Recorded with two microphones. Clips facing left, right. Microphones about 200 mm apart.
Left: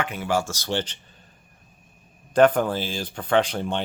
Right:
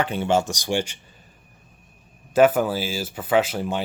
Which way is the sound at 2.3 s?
5° right (ahead or behind).